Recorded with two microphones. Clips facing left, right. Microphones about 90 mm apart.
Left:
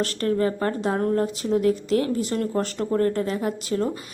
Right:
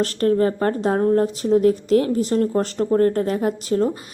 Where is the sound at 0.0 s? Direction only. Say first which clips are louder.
Right 5 dB; 40° right (ahead or behind).